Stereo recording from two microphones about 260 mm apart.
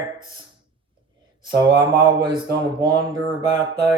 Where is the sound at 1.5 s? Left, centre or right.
Centre.